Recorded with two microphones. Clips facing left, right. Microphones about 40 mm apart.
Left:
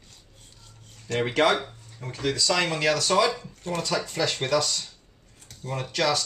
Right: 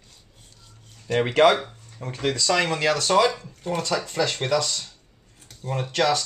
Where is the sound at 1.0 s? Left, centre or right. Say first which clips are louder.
Right 4 dB; centre.